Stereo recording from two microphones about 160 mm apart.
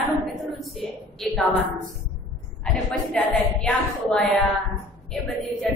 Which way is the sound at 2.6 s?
5° left (ahead or behind).